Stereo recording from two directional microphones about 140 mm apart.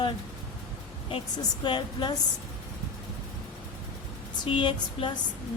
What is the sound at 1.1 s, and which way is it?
A woman's voice, 35° left (ahead or behind).